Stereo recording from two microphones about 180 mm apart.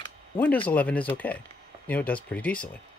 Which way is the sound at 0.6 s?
10° left (ahead or behind).